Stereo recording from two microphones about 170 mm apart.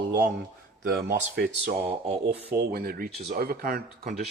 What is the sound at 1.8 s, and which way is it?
Mantra, 35° right (ahead or behind).